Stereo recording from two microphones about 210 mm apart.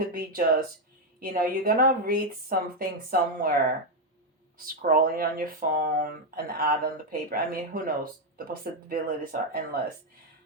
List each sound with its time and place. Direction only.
0.1 s speech: 45° right (ahead or behind)
4.5 s speech: 45° right (ahead or behind)